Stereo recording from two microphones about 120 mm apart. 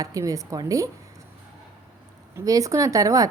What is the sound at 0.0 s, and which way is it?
Speech, 30° right (ahead or behind).